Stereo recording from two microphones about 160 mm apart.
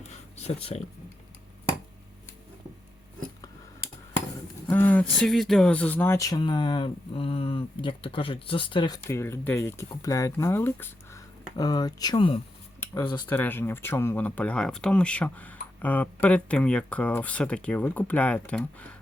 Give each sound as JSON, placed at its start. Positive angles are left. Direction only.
{"t": 0.3, "sound": "speech", "side_deg": 40}
{"t": 4.7, "sound": "speech", "side_deg": 10}
{"t": 9.0, "sound": "speech", "side_deg": 15}
{"t": 12.8, "sound": "a sound", "side_deg": 20}
{"t": 13.2, "sound": "speech", "side_deg": 10}